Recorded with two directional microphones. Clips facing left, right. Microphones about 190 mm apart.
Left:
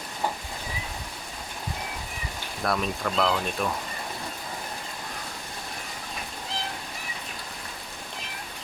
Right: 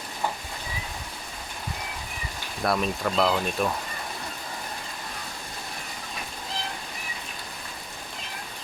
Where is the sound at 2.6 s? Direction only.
5° right (ahead or behind).